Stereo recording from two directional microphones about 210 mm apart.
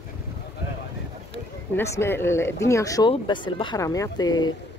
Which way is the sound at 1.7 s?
15° left (ahead or behind).